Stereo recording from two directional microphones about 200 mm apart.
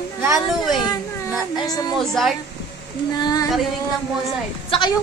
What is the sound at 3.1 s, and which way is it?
Female singing, 20° left (ahead or behind).